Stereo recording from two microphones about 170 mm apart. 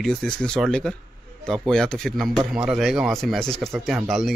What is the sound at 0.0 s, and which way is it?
A man's voice, centre (ahead or behind).